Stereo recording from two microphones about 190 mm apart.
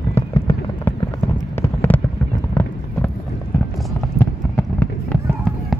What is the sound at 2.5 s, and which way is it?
Clip-clop, 10° left (ahead or behind).